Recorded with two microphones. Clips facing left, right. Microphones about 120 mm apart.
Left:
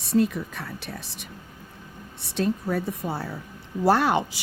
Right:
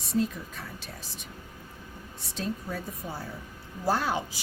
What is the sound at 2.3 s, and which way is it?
A woman's voice, 65° left (ahead or behind).